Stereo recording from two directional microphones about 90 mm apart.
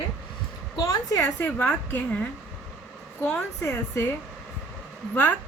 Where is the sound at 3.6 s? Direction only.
30° left (ahead or behind).